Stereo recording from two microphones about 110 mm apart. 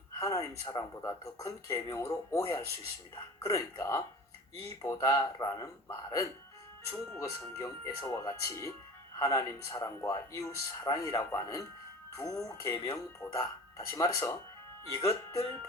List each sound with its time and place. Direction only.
0.2 s speech: 30° left (ahead or behind)